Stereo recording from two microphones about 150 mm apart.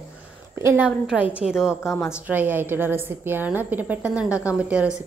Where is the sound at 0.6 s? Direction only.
15° right (ahead or behind).